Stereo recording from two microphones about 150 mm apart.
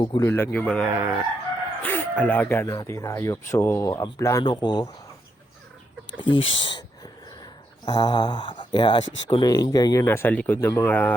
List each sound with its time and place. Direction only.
0.0 s speech: 30° left (ahead or behind)
0.3 s a man's voice: 15° left (ahead or behind)
0.9 s chicken: 20° right (ahead or behind)
1.8 s speech: 10° left (ahead or behind); by 4.9 s 30° left (ahead or behind)
6.1 s speech: 35° left (ahead or behind)
7.9 s speech: 30° left (ahead or behind); by 11.1 s 15° left (ahead or behind)